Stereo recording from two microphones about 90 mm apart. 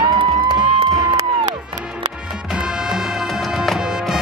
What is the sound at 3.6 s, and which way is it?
Music, 5° right (ahead or behind).